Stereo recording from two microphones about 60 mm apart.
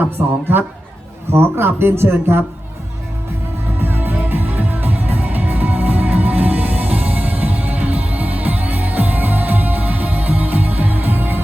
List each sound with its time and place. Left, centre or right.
0.2 s a woman's voice: right
1.3 s a man's voice: right
3.8 s music: right